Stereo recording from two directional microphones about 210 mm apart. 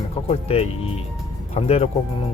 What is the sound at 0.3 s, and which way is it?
Speech, 30° left (ahead or behind).